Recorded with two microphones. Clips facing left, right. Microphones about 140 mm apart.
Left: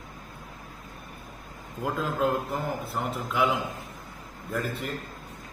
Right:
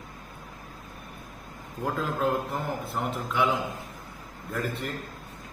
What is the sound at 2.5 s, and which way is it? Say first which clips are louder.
Speech: left 1 dB; centre (ahead or behind).